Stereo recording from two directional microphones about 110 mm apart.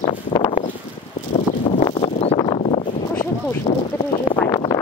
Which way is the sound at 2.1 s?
65° left (ahead or behind).